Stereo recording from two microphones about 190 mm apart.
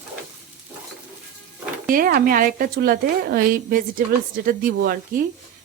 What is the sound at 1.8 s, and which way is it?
Speech, 50° right (ahead or behind).